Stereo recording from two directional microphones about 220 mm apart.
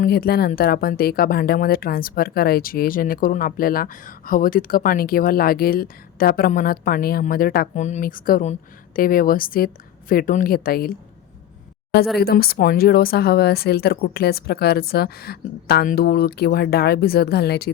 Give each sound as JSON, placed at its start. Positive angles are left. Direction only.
{"t": 0.0, "sound": "speech", "side_deg": 45}
{"t": 12.1, "sound": "speech", "side_deg": 45}